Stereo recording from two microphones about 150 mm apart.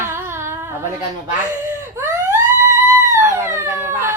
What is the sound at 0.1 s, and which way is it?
Humming, 15° right (ahead or behind).